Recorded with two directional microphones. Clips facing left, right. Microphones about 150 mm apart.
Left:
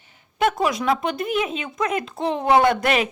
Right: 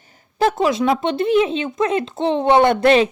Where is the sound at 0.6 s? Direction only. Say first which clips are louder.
Right 4 dB; 25° right (ahead or behind).